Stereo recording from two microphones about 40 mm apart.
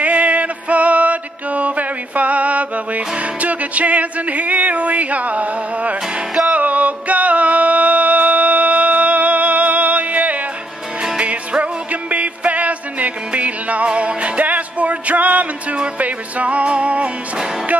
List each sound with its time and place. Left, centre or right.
0.0 s music: right